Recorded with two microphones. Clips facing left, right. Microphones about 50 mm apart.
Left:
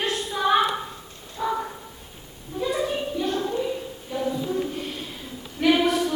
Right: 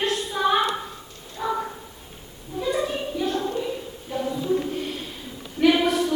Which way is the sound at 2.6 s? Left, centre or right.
Centre.